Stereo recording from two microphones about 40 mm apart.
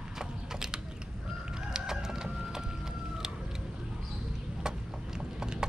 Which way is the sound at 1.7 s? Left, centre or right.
Centre.